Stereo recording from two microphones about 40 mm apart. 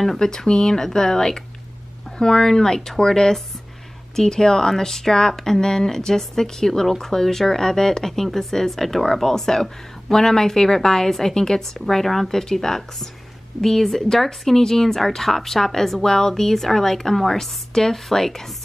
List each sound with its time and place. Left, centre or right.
0.2 s speech: centre